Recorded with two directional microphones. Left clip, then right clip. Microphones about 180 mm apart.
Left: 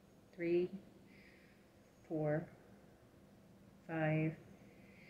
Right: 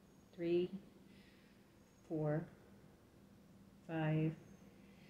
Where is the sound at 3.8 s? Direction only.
25° right (ahead or behind).